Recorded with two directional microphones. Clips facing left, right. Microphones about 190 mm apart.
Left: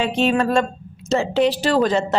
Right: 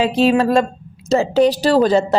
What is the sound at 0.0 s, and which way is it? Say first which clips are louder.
A woman's voice: right 4 dB; 35° right (ahead or behind).